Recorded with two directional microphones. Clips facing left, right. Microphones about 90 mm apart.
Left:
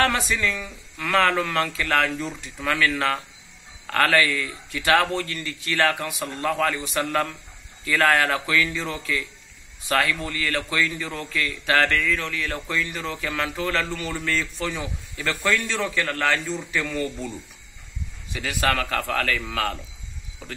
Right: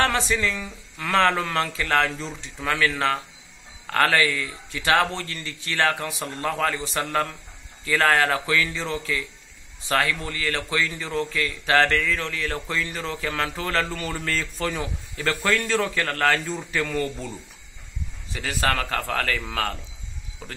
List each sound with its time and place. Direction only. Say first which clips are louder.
0.0 s a man's voice: even; 30° right (ahead or behind)
18.3 s a man's voice: left 1 dB; 35° right (ahead or behind)